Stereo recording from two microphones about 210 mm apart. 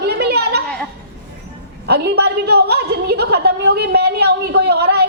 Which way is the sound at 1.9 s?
50° right (ahead or behind).